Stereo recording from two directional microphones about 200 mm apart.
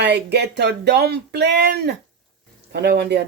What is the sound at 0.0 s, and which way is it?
Speech, 55° right (ahead or behind).